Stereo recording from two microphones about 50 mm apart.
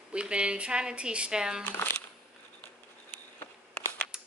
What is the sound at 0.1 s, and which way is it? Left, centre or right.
A woman's voice, right.